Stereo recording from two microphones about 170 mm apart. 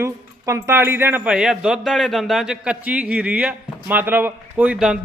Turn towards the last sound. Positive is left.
turn(degrees=-5)  # may be behind; listen again after turning